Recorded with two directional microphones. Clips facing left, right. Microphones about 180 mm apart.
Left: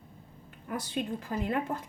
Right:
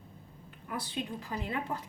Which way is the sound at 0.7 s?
45° left (ahead or behind).